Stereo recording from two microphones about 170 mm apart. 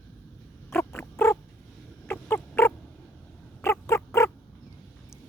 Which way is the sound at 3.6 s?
15° left (ahead or behind).